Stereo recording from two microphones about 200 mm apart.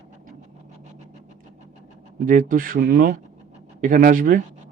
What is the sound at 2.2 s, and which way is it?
Speech, 40° right (ahead or behind).